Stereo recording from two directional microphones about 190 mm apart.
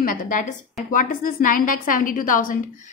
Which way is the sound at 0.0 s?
45° left (ahead or behind).